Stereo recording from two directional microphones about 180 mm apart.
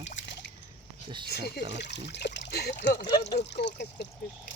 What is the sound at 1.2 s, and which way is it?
Speech, 65° left (ahead or behind).